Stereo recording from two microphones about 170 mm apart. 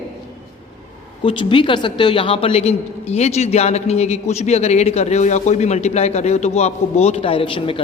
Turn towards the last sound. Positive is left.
turn(degrees=30)  # may be behind; listen again after turning